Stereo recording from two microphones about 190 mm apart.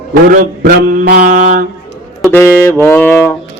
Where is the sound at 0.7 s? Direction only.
50° right (ahead or behind).